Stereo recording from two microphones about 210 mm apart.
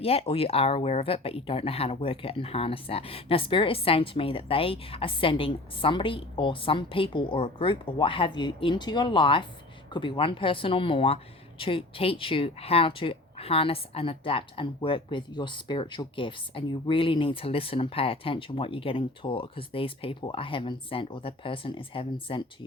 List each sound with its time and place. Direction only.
0.0 s speech: 30° left (ahead or behind)